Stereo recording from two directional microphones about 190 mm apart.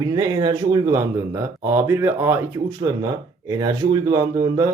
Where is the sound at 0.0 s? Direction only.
20° right (ahead or behind).